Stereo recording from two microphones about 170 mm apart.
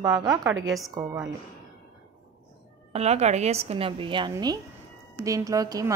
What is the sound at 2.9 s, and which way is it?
A woman's voice, 40° right (ahead or behind).